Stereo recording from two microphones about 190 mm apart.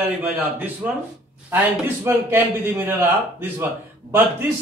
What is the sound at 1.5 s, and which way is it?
A man's voice, 10° right (ahead or behind).